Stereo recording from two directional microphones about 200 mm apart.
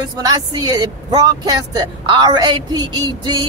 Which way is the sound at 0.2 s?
20° right (ahead or behind).